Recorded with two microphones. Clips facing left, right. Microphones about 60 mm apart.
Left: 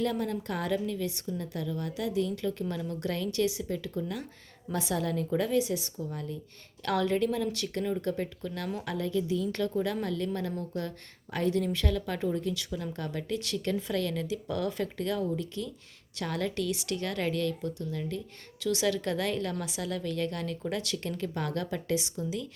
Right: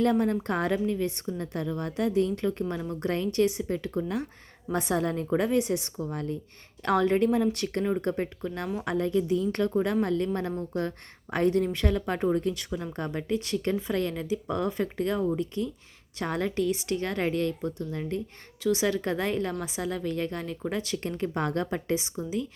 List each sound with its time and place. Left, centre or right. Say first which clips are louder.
0.0 s a woman's voice: right 6 dB; right
6.8 s a woman's voice: right 4 dB; right
18.6 s speech: right 3 dB; right